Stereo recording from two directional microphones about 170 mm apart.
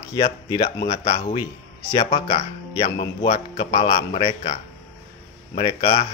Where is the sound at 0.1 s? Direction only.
25° left (ahead or behind).